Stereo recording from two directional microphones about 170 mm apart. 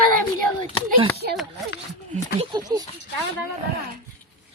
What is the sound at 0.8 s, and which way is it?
Speech, 70° right (ahead or behind).